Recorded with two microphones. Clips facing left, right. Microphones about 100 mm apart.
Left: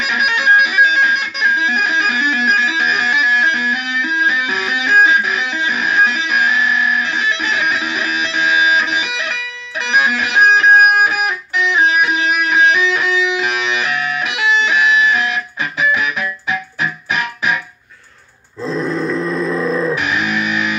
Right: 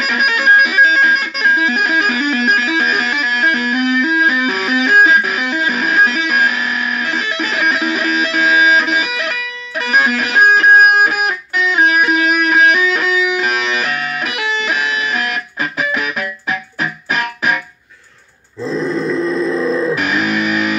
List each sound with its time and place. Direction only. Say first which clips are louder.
0.0 s music: right 1 dB; 40° right (ahead or behind)
11.7 s music: right 2 dB; 40° right (ahead or behind)
12.6 s music: right 1 dB; 55° right (ahead or behind)
13.8 s music: left 1 dB; 45° right (ahead or behind)
18.6 s grunt: right 1 dB; centre (ahead or behind)
20.1 s music: right 2 dB; 40° right (ahead or behind)